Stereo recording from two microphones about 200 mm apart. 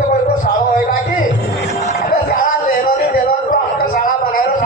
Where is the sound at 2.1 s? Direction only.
45° left (ahead or behind).